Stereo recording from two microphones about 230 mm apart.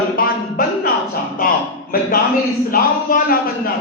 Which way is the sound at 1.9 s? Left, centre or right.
Left.